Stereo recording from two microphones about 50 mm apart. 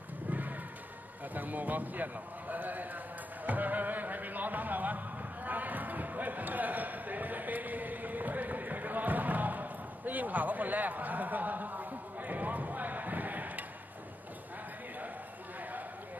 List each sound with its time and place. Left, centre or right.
0.3 s a sound: right
1.3 s a man's voice: right
3.4 s music: right